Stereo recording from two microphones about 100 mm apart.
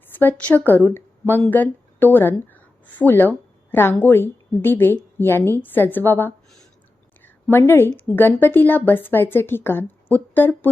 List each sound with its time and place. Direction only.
0.2 s a woman's voice: 15° left (ahead or behind)
7.5 s a woman's voice: 25° left (ahead or behind)